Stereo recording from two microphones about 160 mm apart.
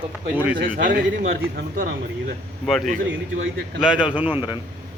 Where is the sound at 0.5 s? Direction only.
60° right (ahead or behind).